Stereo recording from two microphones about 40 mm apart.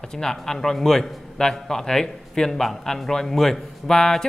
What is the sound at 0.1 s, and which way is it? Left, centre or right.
A man's voice, centre.